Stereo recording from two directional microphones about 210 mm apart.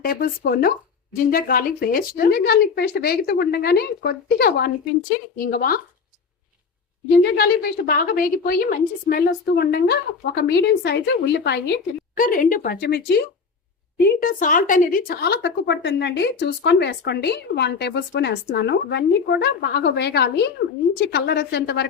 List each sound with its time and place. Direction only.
0.0 s a woman's voice: 45° left (ahead or behind)
7.2 s a woman's voice: 50° left (ahead or behind)